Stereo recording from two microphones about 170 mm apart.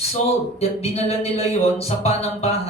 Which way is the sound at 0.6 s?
40° left (ahead or behind).